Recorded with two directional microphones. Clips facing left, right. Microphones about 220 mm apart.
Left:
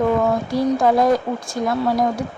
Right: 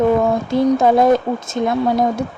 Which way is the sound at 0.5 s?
25° right (ahead or behind).